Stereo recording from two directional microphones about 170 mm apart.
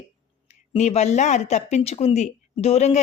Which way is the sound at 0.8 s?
40° left (ahead or behind).